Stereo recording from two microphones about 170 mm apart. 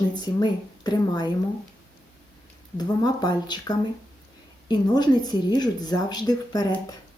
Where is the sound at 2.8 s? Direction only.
25° left (ahead or behind).